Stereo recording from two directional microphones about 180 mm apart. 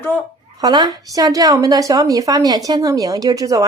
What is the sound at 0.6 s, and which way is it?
A woman's voice, 20° right (ahead or behind).